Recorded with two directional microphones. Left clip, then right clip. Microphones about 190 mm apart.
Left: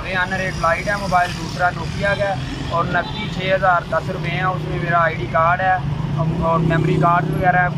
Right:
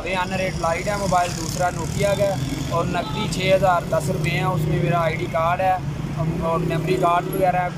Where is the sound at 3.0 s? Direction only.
20° right (ahead or behind).